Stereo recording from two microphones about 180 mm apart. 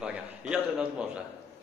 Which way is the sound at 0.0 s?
5° right (ahead or behind).